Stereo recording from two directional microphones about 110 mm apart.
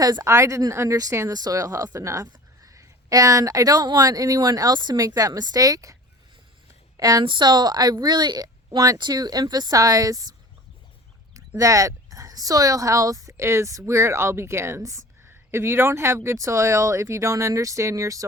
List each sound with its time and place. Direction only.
0.0 s a woman's voice: 35° right (ahead or behind)
7.3 s speech: 40° right (ahead or behind)
11.3 s speech: 30° right (ahead or behind)